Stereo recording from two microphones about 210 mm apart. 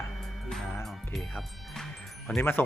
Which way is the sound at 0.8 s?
Centre (ahead or behind).